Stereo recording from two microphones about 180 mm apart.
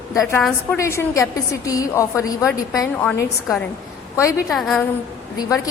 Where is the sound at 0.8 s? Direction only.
15° left (ahead or behind).